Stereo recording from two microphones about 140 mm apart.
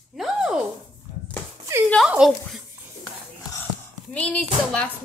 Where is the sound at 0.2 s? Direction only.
5° right (ahead or behind).